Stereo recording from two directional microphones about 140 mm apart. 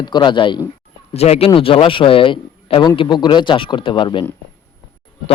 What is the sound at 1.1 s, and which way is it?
A man's voice, 50° left (ahead or behind).